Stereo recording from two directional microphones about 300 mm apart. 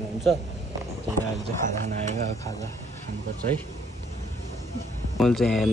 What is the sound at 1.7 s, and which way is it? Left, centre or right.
Speech, right.